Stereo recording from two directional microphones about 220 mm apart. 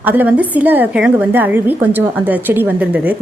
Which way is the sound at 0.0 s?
10° right (ahead or behind).